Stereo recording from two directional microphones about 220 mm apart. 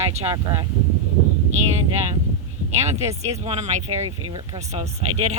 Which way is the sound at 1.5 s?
30° right (ahead or behind).